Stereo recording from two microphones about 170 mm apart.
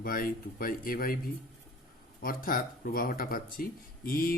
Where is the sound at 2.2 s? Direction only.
55° left (ahead or behind).